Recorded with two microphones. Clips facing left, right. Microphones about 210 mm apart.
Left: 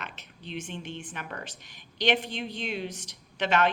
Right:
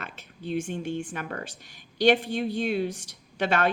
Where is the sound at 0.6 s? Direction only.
45° right (ahead or behind).